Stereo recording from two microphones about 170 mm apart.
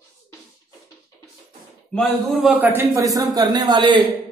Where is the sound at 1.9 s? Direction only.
Centre (ahead or behind); by 4.0 s 30° right (ahead or behind).